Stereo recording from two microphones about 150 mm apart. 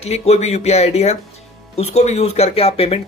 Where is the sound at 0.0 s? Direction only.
45° left (ahead or behind).